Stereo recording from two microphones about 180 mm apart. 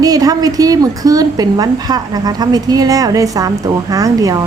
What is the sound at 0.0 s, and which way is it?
A woman's voice, 20° right (ahead or behind).